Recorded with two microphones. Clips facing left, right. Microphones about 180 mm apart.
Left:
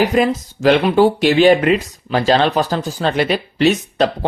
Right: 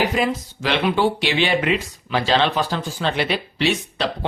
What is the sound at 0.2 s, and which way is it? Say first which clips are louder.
Speech: left 6 dB; 45° left (ahead or behind).